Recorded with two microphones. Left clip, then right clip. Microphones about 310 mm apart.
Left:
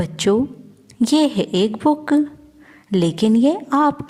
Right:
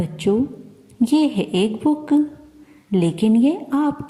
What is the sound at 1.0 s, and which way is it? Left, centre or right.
Speech, left.